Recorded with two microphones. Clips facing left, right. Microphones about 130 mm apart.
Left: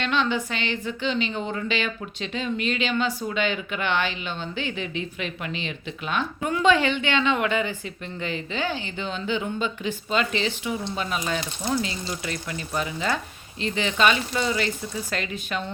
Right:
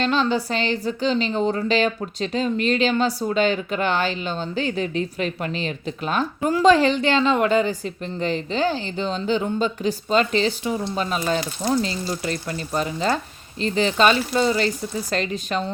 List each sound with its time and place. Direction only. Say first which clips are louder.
0.0 s a woman's voice: right 4 dB; 35° right (ahead or behind)